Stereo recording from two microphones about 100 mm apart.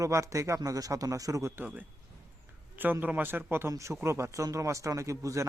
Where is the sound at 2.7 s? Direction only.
20° right (ahead or behind).